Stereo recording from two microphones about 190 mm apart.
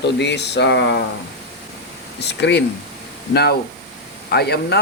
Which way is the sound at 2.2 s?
60° left (ahead or behind).